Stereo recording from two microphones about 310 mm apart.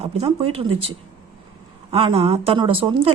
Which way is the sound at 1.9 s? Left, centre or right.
Centre.